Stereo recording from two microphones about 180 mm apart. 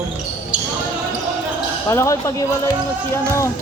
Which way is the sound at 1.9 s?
15° left (ahead or behind).